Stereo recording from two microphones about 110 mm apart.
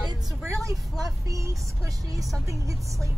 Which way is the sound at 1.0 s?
30° right (ahead or behind).